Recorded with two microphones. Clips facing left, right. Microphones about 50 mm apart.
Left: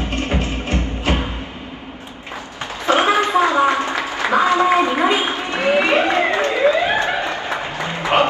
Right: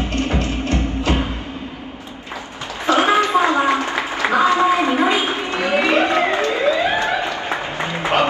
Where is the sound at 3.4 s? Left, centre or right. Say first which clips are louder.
Left 2 dB; right.